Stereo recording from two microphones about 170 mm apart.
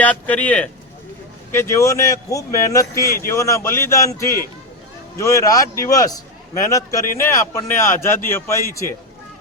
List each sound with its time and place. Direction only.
0.0 s a man's voice: 10° left (ahead or behind)